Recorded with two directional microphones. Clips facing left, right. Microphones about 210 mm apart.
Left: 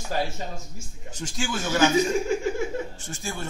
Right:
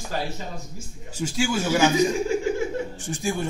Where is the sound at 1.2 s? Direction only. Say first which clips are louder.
Right 6 dB; 10° right (ahead or behind).